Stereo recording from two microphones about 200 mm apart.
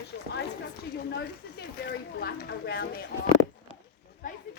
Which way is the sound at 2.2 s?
50° left (ahead or behind).